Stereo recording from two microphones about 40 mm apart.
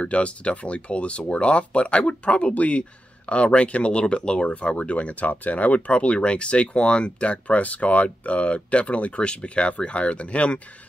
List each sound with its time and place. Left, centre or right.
0.0 s speech: left